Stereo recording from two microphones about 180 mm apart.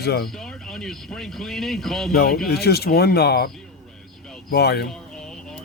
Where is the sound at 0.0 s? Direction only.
60° left (ahead or behind).